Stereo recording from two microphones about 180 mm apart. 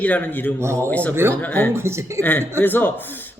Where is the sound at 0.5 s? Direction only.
15° right (ahead or behind).